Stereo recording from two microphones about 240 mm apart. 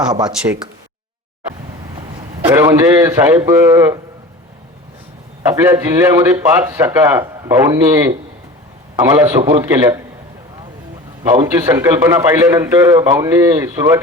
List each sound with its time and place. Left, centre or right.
0.1 s a man's voice: centre
2.5 s a man's voice: centre
5.5 s a man's voice: centre
11.2 s a man's voice: centre